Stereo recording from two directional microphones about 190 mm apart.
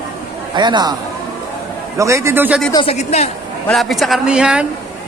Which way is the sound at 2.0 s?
15° right (ahead or behind).